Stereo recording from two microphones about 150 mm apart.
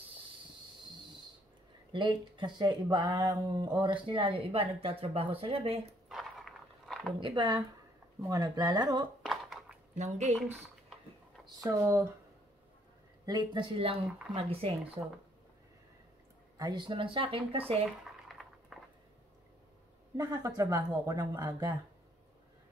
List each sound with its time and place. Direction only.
1.9 s speech: 30° right (ahead or behind)
6.0 s a sound: centre (ahead or behind)
7.2 s speech: 35° right (ahead or behind)
9.2 s a sound: centre (ahead or behind)
9.9 s speech: 50° right (ahead or behind)
11.6 s speech: 20° right (ahead or behind)
13.2 s speech: 25° right (ahead or behind)
14.0 s speech: 5° right (ahead or behind)
14.3 s speech: 40° right (ahead or behind)
16.5 s speech: 30° right (ahead or behind)
18.3 s a sound: centre (ahead or behind)
20.2 s speech: 25° right (ahead or behind)